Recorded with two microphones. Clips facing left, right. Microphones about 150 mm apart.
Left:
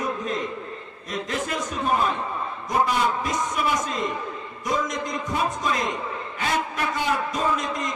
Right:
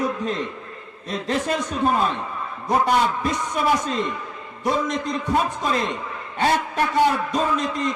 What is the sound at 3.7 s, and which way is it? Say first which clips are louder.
A man's voice: right 2 dB; 30° right (ahead or behind).